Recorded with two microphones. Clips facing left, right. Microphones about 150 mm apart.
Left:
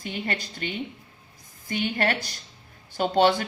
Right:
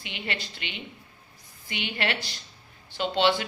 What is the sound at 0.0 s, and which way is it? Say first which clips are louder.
A woman's voice: left 4 dB; 45° left (ahead or behind).